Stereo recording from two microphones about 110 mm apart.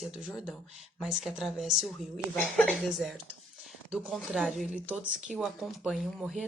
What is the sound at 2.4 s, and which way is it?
Speech, 15° left (ahead or behind).